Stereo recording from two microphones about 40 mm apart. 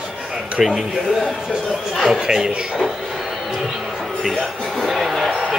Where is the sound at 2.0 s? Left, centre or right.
Centre.